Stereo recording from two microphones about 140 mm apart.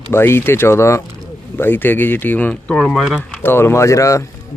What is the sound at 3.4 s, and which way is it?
Speech, 15° left (ahead or behind).